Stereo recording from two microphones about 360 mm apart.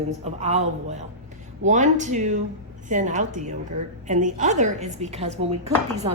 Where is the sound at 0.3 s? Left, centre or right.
Centre.